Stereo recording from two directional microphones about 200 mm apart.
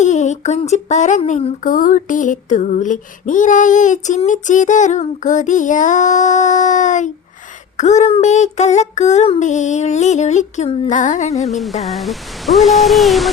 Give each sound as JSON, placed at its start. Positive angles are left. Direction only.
{"t": 0.0, "sound": "speech", "side_deg": 35}
{"t": 11.4, "sound": "speech", "side_deg": 0}